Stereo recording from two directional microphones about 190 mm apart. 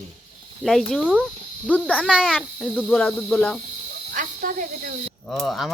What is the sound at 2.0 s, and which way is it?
Speech, 5° right (ahead or behind).